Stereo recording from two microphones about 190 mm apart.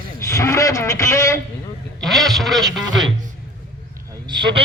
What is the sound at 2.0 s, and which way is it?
Speech, centre (ahead or behind).